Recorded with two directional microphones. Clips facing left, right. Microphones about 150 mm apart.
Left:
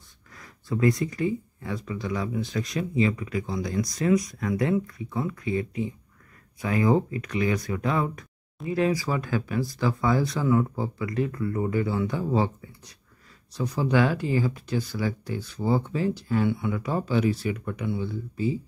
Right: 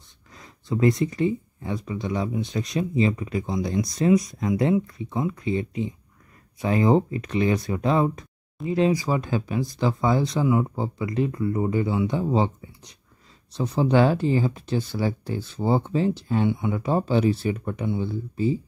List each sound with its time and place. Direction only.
0.3 s speech: 20° right (ahead or behind)